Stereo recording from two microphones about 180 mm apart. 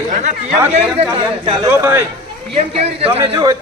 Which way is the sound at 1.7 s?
15° right (ahead or behind).